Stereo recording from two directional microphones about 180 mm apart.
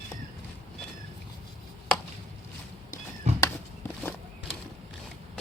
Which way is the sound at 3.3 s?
40° right (ahead or behind).